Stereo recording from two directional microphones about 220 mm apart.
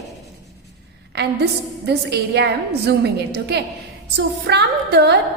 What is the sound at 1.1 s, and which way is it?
A woman's voice, 50° right (ahead or behind).